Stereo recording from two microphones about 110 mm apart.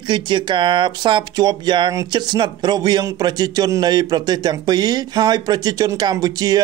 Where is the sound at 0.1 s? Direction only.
45° right (ahead or behind).